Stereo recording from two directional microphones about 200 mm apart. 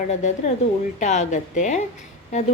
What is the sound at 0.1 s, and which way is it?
A woman's voice, 35° left (ahead or behind).